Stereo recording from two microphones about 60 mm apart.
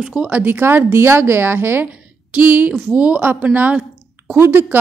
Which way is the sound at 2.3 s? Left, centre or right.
Right.